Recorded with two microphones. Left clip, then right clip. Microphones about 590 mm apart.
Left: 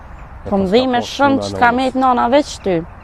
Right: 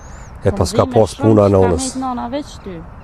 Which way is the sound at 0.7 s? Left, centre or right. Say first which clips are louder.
Left 1 dB; left.